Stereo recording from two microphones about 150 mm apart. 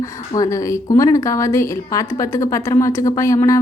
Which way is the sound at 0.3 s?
25° left (ahead or behind).